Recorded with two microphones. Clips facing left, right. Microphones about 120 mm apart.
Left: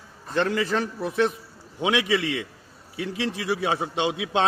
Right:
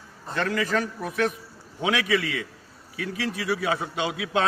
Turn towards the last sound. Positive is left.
turn(degrees=25)  # may be behind; listen again after turning